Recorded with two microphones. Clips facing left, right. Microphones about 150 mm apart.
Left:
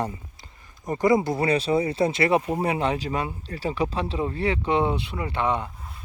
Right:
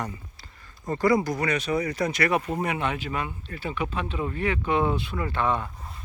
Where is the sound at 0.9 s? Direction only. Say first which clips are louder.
Left 2 dB; 20° left (ahead or behind).